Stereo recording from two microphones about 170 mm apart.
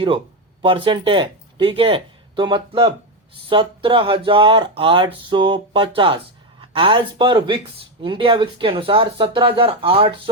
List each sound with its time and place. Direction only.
0.6 s speech: 30° right (ahead or behind)